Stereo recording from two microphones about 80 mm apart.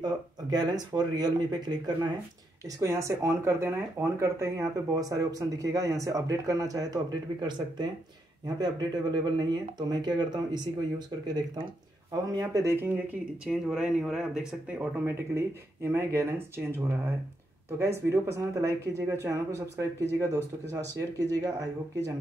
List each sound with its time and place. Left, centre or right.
0.0 s speech: right
2.8 s speech: right
12.3 s speech: right
13.5 s speech: centre
14.8 s speech: right